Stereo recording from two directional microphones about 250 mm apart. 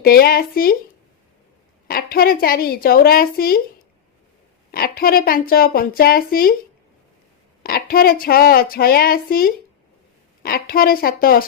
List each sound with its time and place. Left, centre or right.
0.0 s speech: left
1.9 s speech: left
4.7 s speech: left
7.6 s speech: left